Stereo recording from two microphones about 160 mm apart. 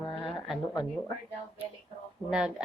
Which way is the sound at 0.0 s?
30° left (ahead or behind).